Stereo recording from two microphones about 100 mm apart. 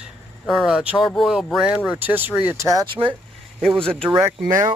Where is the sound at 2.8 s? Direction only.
60° right (ahead or behind).